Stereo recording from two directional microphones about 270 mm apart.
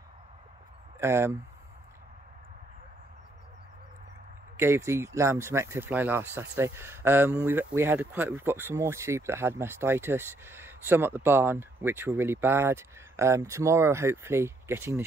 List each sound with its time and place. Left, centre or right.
0.9 s speech: centre
4.6 s speech: centre